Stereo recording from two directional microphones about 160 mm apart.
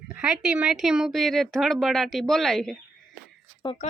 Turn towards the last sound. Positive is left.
turn(degrees=30)  # may be behind; listen again after turning